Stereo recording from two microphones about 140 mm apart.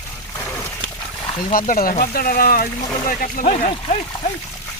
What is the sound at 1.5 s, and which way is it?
Speech, 85° left.